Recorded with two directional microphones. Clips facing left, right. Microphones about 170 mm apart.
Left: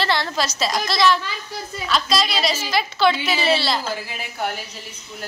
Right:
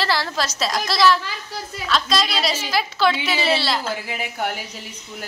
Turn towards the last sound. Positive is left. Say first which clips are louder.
# right 1 dB
turn(degrees=-15)  # may be behind; listen again after turning